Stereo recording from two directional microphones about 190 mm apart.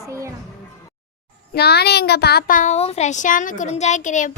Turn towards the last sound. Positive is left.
turn(degrees=40)  # may be behind; listen again after turning